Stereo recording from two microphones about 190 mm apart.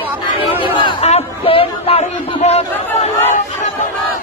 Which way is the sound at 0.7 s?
30° left (ahead or behind).